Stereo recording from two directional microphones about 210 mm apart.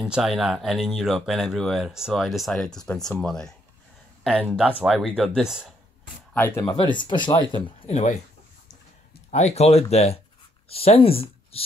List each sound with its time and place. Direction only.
0.0 s speech: 5° right (ahead or behind)
6.3 s speech: 10° left (ahead or behind); by 8.2 s 35° left (ahead or behind)
9.3 s speech: 30° left (ahead or behind)